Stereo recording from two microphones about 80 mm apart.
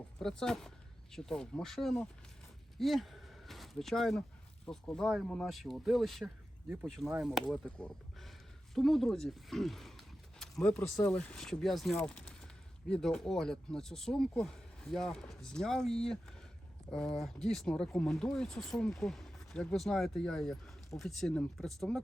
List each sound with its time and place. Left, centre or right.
0.2 s speech: centre
7.8 s a sound: centre
11.0 s speech: centre
11.9 s speech: centre
12.2 s a sound: centre
12.9 s speech: centre